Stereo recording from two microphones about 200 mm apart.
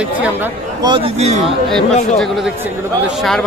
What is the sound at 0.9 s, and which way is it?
Speech, 30° right (ahead or behind).